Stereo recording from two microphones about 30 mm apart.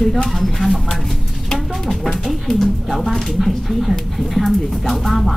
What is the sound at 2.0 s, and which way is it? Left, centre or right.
Speech, centre.